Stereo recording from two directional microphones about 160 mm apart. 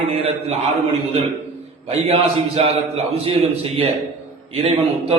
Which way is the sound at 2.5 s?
40° right (ahead or behind).